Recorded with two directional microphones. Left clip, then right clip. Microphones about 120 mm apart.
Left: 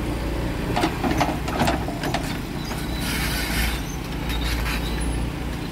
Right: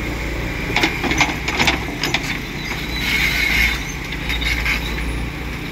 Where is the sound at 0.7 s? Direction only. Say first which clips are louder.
Right 5 dB; 55° left (ahead or behind).